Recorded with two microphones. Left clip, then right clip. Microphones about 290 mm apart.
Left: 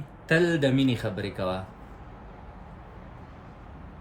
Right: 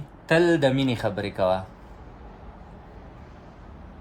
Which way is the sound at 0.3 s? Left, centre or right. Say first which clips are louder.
Right 4 dB; centre.